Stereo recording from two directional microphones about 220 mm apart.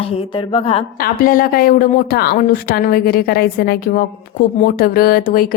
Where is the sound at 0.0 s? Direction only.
25° left (ahead or behind).